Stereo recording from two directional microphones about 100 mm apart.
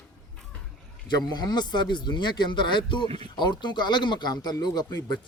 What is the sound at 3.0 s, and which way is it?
Speech, 85° right.